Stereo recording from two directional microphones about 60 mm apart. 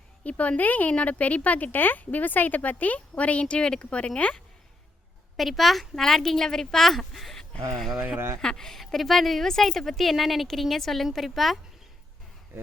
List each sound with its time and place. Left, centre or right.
0.3 s speech: left
5.4 s a woman's voice: centre